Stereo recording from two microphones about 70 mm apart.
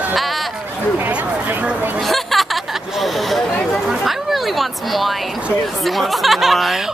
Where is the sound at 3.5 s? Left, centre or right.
Centre.